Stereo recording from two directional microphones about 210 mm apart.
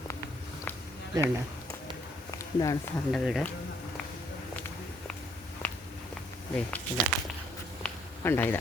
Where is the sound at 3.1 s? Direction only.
Centre (ahead or behind).